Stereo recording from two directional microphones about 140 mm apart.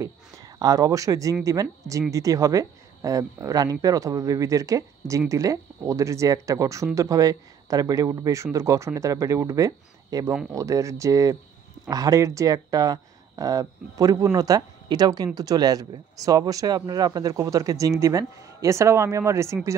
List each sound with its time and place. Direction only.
0.6 s speech: 25° right (ahead or behind)